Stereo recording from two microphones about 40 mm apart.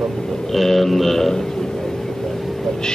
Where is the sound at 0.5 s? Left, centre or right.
Centre.